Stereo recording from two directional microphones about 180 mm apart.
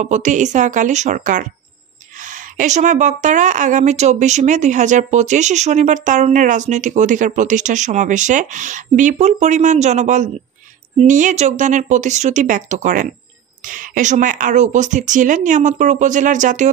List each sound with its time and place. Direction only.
0.0 s a woman's voice: 40° right (ahead or behind)